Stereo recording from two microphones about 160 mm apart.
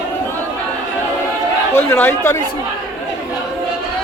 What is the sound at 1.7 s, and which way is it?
Speech, 15° left (ahead or behind).